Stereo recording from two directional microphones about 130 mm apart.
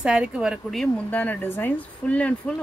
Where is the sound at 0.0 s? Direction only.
5° right (ahead or behind).